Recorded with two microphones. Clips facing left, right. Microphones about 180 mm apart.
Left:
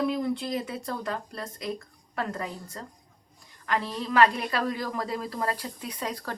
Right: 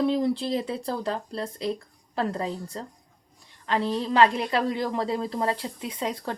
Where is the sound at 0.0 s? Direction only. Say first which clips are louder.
Right 4 dB; 30° right (ahead or behind).